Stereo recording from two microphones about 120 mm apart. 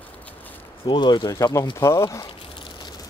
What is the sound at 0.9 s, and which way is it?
Speech, 40° left (ahead or behind).